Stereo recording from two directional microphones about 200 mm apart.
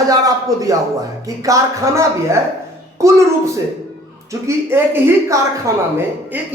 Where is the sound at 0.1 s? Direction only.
15° right (ahead or behind).